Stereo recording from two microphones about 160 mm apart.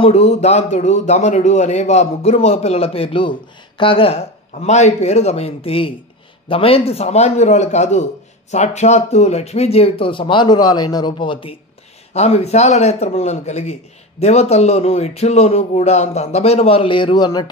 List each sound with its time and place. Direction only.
0.0 s speech: 40° left (ahead or behind)
12.1 s a man's voice: 40° left (ahead or behind); by 17.5 s 25° left (ahead or behind)